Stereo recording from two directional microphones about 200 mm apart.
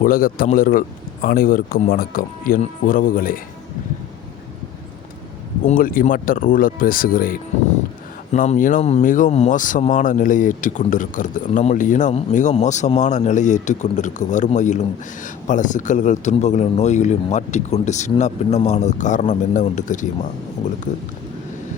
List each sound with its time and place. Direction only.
0.0 s a man's voice: 45° left (ahead or behind)
5.6 s a man's voice: 45° left (ahead or behind)